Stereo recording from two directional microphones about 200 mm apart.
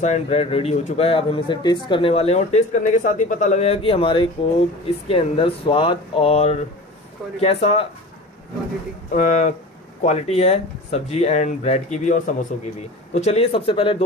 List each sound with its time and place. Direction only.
0.0 s speech: 35° left (ahead or behind)
9.1 s speech: 35° left (ahead or behind)